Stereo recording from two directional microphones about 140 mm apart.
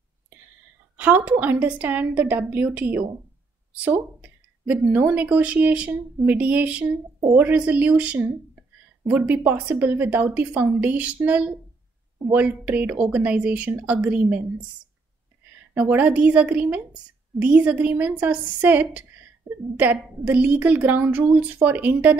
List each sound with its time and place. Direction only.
0.9 s a woman's voice: 10° right (ahead or behind)
15.7 s a woman's voice: 10° right (ahead or behind)